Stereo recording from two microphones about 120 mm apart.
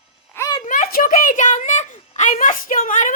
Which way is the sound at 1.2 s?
90° left.